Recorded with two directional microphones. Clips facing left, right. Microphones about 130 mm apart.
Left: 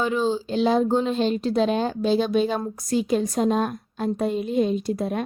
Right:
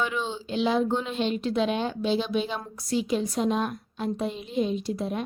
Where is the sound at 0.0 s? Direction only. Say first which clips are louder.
Left 7 dB; 35° left (ahead or behind).